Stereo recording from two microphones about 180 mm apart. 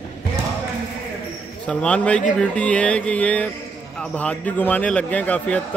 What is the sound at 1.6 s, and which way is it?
A man's voice, 5° left (ahead or behind).